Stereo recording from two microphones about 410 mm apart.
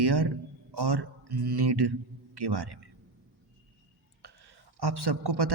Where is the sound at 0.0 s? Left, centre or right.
Right.